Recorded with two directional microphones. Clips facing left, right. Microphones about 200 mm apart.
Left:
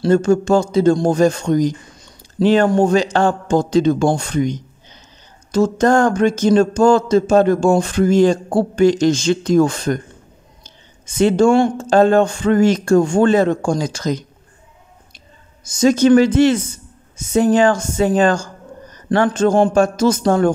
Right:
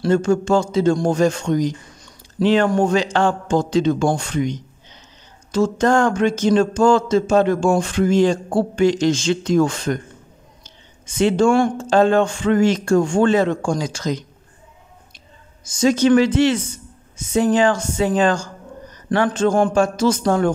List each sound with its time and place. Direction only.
0.1 s speech: 40° left (ahead or behind)
11.1 s speech: 40° left (ahead or behind)
11.4 s speech: 25° left (ahead or behind)
11.9 s speech: 40° left (ahead or behind)
15.8 s speech: 45° left (ahead or behind)